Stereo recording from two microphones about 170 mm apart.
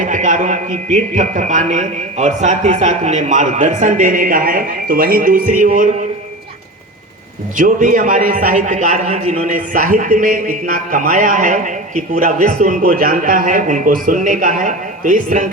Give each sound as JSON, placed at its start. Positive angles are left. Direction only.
{"t": 0.0, "sound": "a man's voice", "side_deg": -50}
{"t": 7.5, "sound": "a man's voice", "side_deg": -50}